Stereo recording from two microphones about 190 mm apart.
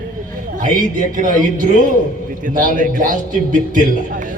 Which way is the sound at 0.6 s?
45° right (ahead or behind).